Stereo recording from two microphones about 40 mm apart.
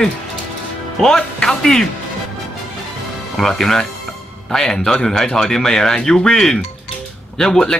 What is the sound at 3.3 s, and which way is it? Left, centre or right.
A woman's voice, centre.